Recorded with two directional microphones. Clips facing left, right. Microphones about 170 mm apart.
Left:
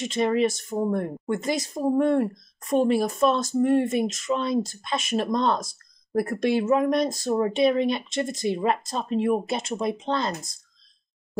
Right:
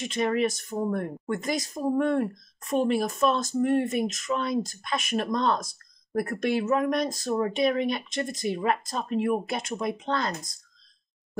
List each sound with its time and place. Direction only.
0.0 s speech: 30° left (ahead or behind)